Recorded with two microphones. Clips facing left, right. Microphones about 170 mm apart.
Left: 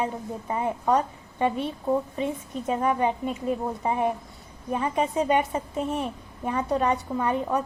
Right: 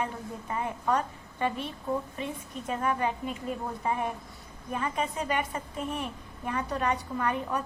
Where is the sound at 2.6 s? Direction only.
20° left (ahead or behind).